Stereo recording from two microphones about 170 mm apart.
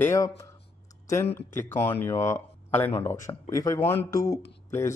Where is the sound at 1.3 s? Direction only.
15° left (ahead or behind).